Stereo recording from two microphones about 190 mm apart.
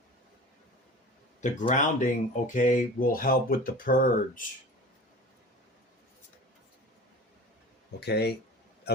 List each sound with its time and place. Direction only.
1.4 s speech: 40° left (ahead or behind)
7.9 s speech: 60° left (ahead or behind)